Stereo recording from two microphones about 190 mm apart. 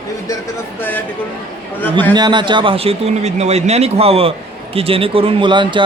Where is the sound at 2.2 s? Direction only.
25° right (ahead or behind).